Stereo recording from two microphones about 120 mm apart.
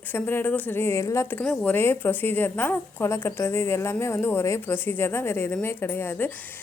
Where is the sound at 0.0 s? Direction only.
15° left (ahead or behind).